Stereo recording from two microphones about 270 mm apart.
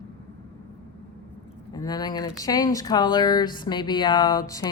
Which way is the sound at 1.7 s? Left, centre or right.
Centre.